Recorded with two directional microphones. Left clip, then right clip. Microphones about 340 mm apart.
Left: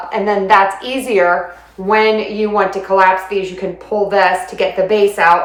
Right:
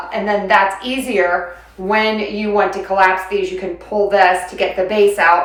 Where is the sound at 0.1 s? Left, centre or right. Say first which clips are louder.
Left 3 dB; centre.